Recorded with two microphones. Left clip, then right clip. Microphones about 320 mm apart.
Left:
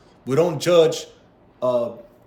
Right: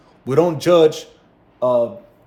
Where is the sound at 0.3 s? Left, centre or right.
Centre.